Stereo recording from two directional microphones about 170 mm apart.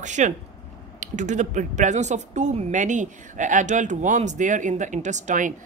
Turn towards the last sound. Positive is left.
turn(degrees=-45)  # may be behind; listen again after turning